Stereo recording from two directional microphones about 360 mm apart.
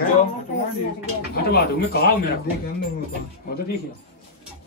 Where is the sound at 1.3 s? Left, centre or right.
Left.